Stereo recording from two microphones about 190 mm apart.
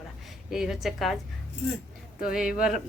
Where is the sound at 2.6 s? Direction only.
Centre (ahead or behind).